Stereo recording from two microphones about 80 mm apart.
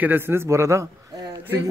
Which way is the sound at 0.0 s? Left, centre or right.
Right.